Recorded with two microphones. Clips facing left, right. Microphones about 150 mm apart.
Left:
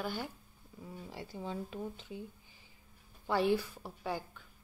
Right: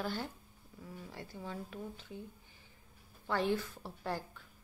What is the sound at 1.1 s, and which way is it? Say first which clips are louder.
Speech: left 4 dB; 15° left (ahead or behind).